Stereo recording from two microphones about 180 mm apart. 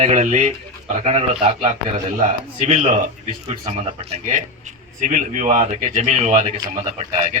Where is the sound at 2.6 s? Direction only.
40° right (ahead or behind).